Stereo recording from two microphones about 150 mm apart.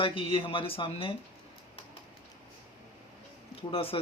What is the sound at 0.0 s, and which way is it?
A man's voice, 35° left (ahead or behind).